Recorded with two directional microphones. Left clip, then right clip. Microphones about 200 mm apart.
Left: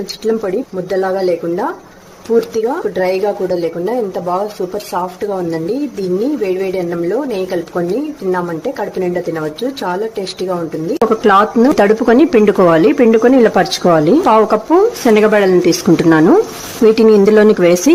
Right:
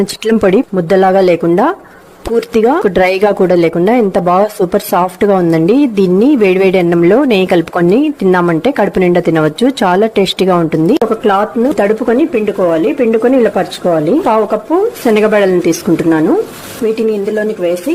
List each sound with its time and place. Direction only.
0.0 s a woman's voice: 45° right (ahead or behind)
11.0 s a woman's voice: centre (ahead or behind)
15.0 s a woman's voice: centre (ahead or behind)
16.8 s speech: 25° left (ahead or behind)